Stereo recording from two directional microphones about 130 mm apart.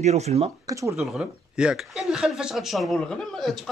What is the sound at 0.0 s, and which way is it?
Speech, 60° right (ahead or behind).